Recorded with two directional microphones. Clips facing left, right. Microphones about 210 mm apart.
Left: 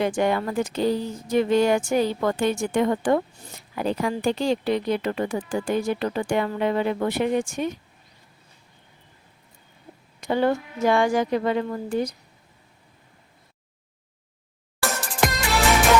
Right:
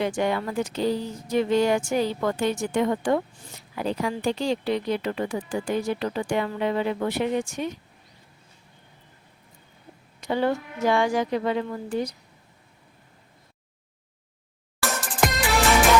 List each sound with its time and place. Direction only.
0.0 s speech: 50° left (ahead or behind)
10.2 s speech: 50° left (ahead or behind)
14.8 s music: centre (ahead or behind)